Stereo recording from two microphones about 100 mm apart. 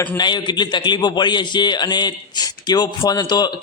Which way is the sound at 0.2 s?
50° left (ahead or behind).